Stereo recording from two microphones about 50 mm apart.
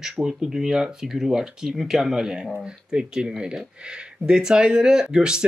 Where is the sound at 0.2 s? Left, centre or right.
Centre.